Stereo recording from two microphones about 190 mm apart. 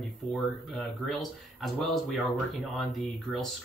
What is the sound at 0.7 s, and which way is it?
Speech, centre (ahead or behind).